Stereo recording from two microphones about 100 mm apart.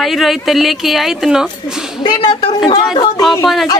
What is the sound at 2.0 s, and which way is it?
Speech, 50° left (ahead or behind).